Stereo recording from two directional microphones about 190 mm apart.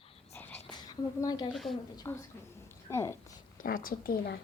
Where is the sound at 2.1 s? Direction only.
15° left (ahead or behind).